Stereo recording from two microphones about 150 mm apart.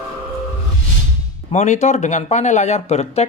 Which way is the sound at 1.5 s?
50° left (ahead or behind).